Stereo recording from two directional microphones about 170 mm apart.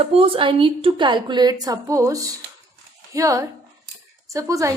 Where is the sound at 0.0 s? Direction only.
35° right (ahead or behind).